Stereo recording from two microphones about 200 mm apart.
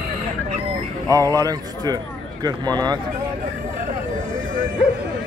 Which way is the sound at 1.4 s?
20° right (ahead or behind).